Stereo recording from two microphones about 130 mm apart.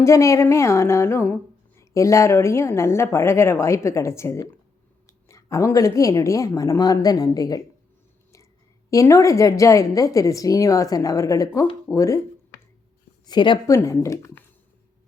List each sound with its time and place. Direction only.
0.0 s speech: 20° left (ahead or behind)
8.9 s speech: 25° left (ahead or behind)
13.2 s speech: 35° left (ahead or behind)
13.7 s speech: 25° left (ahead or behind)